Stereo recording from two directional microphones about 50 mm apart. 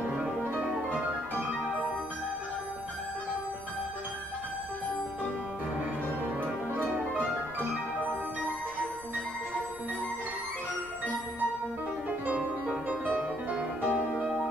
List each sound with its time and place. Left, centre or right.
0.8 s music: left
6.4 s music: right
12.1 s music: right